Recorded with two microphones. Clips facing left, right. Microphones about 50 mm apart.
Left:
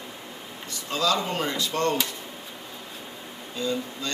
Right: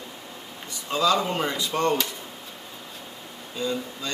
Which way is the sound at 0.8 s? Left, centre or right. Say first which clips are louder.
Right 3 dB; centre.